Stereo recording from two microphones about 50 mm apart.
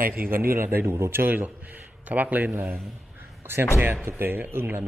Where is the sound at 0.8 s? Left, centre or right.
Right.